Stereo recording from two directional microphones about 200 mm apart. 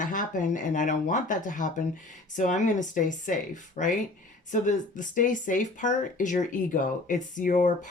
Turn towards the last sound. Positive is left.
turn(degrees=40)  # may be behind; listen again after turning